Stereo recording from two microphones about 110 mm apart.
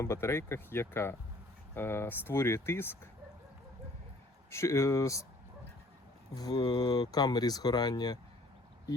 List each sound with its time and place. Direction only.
0.0 s speech: 25° left (ahead or behind)
4.5 s speech: 25° left (ahead or behind)
6.3 s speech: 35° left (ahead or behind)